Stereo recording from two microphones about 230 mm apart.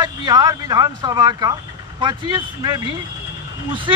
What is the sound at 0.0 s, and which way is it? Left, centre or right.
A man's voice, centre.